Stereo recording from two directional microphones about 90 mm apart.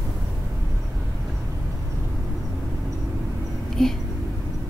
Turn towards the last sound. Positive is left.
turn(degrees=5)  # may be behind; listen again after turning